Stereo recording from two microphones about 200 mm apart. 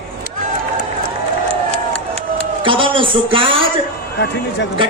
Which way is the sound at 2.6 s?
25° right (ahead or behind).